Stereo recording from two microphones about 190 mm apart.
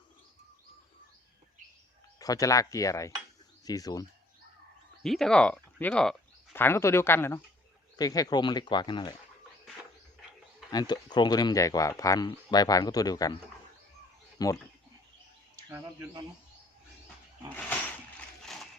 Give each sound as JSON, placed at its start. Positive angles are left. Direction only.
{"t": 2.1, "sound": "speech", "side_deg": 20}
{"t": 5.0, "sound": "speech", "side_deg": 0}
{"t": 10.7, "sound": "speech", "side_deg": 20}
{"t": 14.3, "sound": "speech", "side_deg": 20}